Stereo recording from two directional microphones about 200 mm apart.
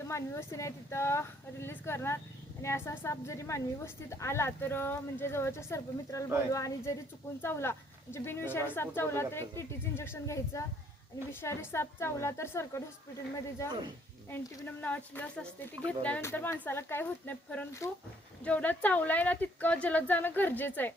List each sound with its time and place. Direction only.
0.0 s a woman's voice: 15° left (ahead or behind)